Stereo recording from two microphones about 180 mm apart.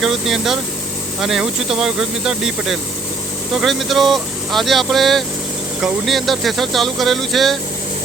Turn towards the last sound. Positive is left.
turn(degrees=0)  # may be behind; listen again after turning